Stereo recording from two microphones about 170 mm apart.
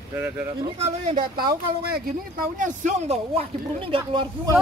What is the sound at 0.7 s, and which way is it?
Speech, 40° right (ahead or behind).